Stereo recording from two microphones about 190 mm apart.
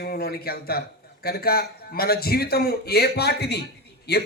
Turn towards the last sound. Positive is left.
turn(degrees=60)  # may be behind; listen again after turning